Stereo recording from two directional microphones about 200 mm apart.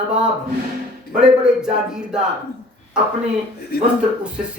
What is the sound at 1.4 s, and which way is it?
Speech, 5° right (ahead or behind).